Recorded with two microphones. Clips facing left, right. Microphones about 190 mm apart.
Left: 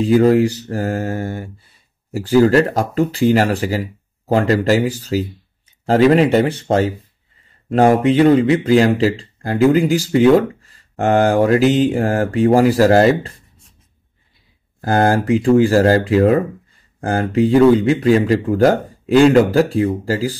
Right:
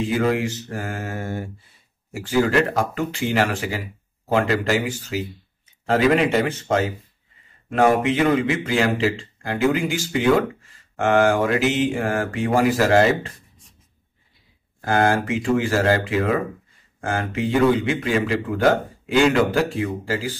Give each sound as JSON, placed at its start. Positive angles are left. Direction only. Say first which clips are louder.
{"t": 0.0, "sound": "speech", "louder": "left 9 dB", "side_deg": 35}
{"t": 14.8, "sound": "speech", "louder": "left 4 dB", "side_deg": 40}